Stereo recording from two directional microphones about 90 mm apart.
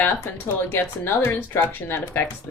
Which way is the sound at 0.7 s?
25° left (ahead or behind).